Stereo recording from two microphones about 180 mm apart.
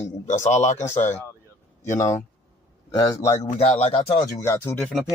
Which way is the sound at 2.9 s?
20° left (ahead or behind).